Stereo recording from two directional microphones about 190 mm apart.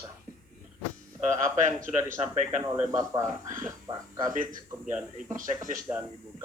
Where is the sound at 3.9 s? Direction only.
25° right (ahead or behind).